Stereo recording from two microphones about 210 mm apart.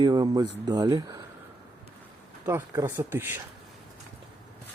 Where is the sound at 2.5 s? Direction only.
10° right (ahead or behind).